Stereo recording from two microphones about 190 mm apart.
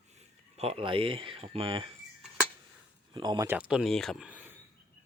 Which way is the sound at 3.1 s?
25° right (ahead or behind).